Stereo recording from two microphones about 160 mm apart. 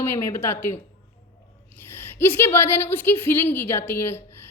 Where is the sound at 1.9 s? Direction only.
15° left (ahead or behind).